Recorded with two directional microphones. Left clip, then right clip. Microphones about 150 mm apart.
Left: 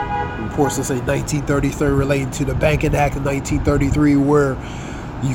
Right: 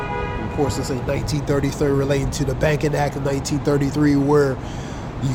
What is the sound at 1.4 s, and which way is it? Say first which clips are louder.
Speech: left 1 dB; 10° left (ahead or behind).